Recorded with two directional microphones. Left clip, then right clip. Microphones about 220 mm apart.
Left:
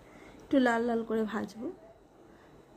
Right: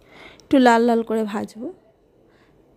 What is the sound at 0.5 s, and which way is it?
A woman's voice, 40° right (ahead or behind).